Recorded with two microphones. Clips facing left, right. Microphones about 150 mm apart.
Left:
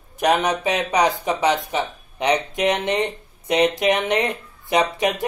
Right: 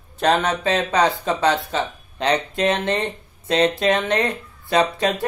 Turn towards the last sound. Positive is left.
turn(degrees=15)  # may be behind; listen again after turning